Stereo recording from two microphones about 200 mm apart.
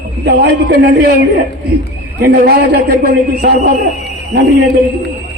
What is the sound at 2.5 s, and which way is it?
A man's voice, 50° right (ahead or behind).